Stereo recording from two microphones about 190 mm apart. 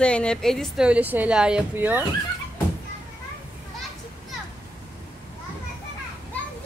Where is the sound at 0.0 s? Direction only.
5° left (ahead or behind); by 2.0 s 10° right (ahead or behind).